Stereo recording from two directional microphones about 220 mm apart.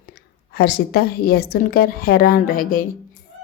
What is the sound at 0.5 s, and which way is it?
A woman's voice, 45° left (ahead or behind).